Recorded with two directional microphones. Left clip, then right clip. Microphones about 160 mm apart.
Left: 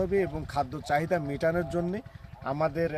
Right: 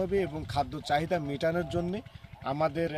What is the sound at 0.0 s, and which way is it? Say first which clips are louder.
Speech: left 2 dB; 10° left (ahead or behind).